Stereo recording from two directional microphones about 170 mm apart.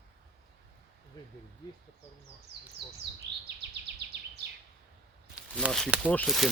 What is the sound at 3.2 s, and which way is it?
Chirp, 90° right.